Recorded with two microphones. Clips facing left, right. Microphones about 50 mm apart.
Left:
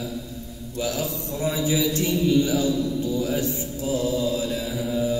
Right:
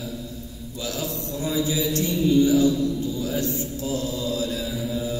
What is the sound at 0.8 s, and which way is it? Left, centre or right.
Mantra, left.